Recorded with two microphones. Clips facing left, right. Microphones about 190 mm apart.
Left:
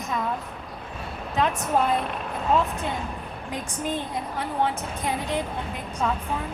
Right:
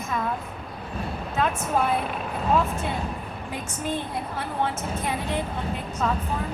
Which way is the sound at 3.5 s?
15° left (ahead or behind).